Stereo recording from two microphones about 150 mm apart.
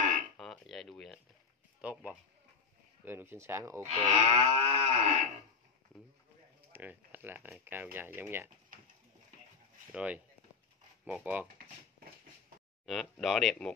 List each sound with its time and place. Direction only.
0.4 s a sound: centre (ahead or behind)
3.1 s speech: 15° right (ahead or behind)
3.8 s moo: 50° right (ahead or behind)
6.7 s speech: 10° right (ahead or behind)
8.7 s pigeon: 65° right (ahead or behind)
9.9 s speech: 10° right (ahead or behind)
12.8 s speech: centre (ahead or behind)